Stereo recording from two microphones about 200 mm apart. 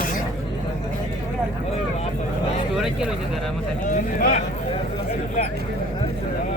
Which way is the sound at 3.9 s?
40° left (ahead or behind).